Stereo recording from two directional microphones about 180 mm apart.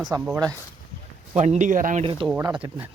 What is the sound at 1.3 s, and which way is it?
Speech, 40° right (ahead or behind).